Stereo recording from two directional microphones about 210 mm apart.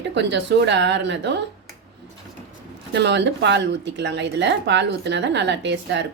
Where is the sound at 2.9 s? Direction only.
55° right (ahead or behind).